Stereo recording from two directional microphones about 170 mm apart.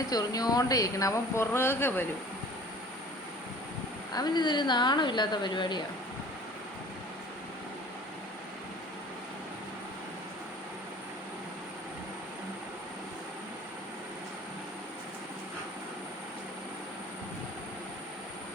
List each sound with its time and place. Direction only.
0.1 s speech: 20° left (ahead or behind)
4.1 s speech: 25° left (ahead or behind)